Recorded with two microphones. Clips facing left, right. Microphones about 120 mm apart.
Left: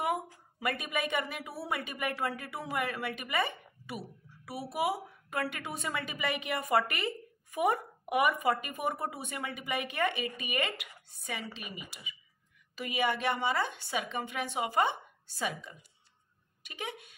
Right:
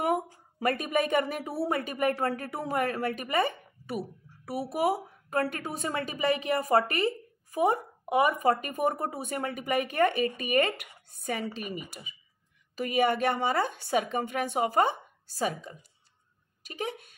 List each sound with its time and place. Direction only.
0.0 s a woman's voice: 40° right (ahead or behind)
16.6 s speech: 40° right (ahead or behind)